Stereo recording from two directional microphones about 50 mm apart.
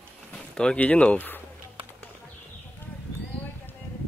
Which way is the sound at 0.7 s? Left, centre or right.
Left.